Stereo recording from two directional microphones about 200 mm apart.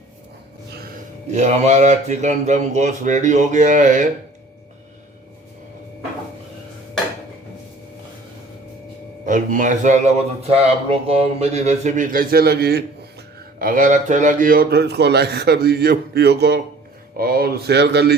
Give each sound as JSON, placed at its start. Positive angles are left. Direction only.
{"t": 1.3, "sound": "speech", "side_deg": -35}
{"t": 9.2, "sound": "a man's voice", "side_deg": -40}